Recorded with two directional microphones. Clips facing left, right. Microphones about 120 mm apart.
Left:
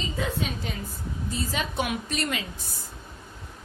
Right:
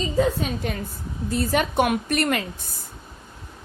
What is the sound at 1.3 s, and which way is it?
A woman's voice, 60° right (ahead or behind).